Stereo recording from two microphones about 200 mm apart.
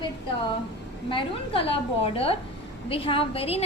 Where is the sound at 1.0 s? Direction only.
25° left (ahead or behind).